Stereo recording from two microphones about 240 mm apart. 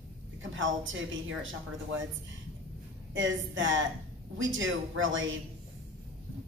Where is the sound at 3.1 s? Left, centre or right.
Right.